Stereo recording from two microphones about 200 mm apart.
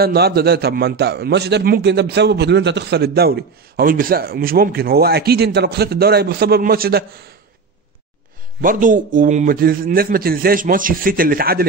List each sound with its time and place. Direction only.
0.0 s a man's voice: 50° right (ahead or behind)
8.5 s a man's voice: 40° right (ahead or behind)